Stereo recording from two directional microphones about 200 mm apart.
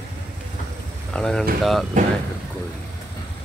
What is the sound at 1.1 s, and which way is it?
Speech, 5° left (ahead or behind).